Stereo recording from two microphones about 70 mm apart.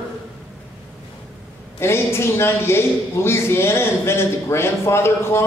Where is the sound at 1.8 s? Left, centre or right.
Left.